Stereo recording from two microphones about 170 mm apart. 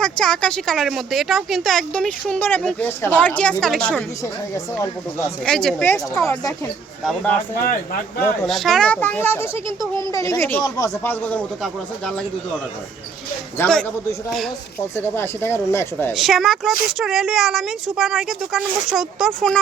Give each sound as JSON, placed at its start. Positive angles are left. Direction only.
{"t": 0.0, "sound": "speech", "side_deg": 5}
{"t": 4.2, "sound": "speech", "side_deg": 15}
{"t": 5.5, "sound": "speech", "side_deg": 5}
{"t": 7.0, "sound": "speech", "side_deg": 5}
{"t": 8.4, "sound": "speech", "side_deg": 0}
{"t": 13.6, "sound": "speech", "side_deg": 10}
{"t": 14.9, "sound": "speech", "side_deg": 10}
{"t": 16.1, "sound": "speech", "side_deg": 0}